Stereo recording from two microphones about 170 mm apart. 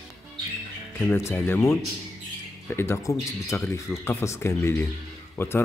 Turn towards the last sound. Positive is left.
turn(degrees=15)  # may be behind; listen again after turning